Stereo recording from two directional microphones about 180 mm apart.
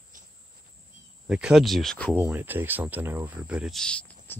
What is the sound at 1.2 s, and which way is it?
Speech, 5° right (ahead or behind).